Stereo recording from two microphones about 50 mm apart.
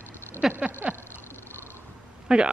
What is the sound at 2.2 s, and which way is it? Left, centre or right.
Speech, centre.